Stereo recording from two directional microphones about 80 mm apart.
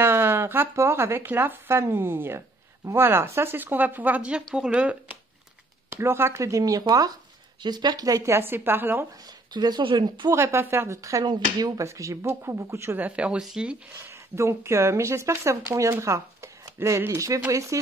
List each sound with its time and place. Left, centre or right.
0.0 s speech: right
5.9 s speech: right
8.3 s speech: right
9.5 s speech: right
10.3 s speech: right
11.0 s speech: right
11.2 s speech: right
13.0 s speech: centre
14.0 s speech: right